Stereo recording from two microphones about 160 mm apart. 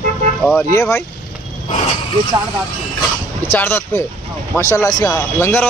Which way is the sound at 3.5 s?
15° left (ahead or behind).